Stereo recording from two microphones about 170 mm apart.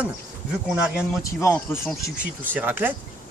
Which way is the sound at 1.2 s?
15° left (ahead or behind).